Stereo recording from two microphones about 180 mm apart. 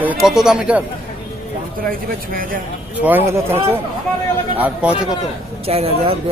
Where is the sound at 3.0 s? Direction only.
10° right (ahead or behind).